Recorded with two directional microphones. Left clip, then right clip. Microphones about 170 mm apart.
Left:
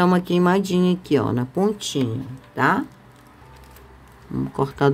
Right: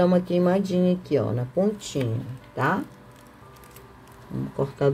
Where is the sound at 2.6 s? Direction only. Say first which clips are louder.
Left 5 dB; 40° left (ahead or behind).